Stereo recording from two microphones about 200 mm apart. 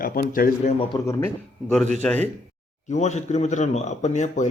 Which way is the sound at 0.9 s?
15° left (ahead or behind).